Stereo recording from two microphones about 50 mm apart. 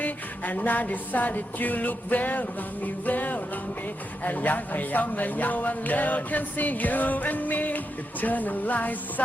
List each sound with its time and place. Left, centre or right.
0.0 s speech: left